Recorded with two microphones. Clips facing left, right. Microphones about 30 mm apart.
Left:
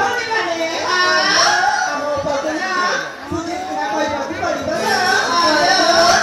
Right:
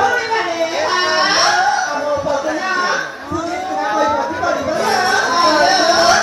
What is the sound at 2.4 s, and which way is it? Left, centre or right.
Chatter, centre.